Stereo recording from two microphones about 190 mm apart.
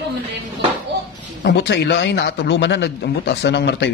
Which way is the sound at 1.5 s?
65° left (ahead or behind).